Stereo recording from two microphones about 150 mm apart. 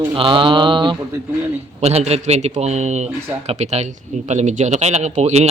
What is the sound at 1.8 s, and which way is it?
A man's voice, 45° right (ahead or behind).